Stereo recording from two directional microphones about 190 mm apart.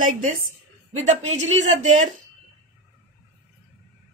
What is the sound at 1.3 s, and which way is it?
Speech, 90° right.